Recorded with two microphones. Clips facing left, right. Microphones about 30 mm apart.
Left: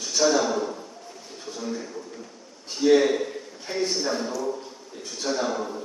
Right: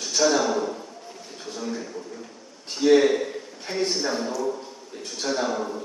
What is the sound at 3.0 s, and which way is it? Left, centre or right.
Speech, centre.